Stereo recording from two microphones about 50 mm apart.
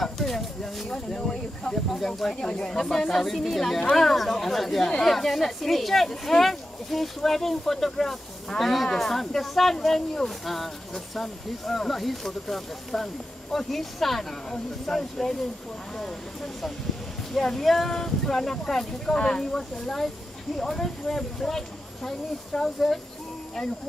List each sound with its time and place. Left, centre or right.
0.0 s speech: centre
17.3 s speech: centre